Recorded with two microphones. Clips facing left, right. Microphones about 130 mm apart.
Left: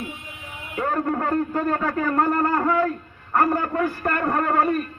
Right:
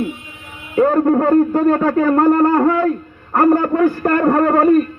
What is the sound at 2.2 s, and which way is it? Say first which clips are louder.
Speech: right 11 dB; 25° right (ahead or behind).